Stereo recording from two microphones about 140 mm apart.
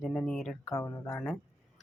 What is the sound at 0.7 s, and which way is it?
Speech, 25° left (ahead or behind).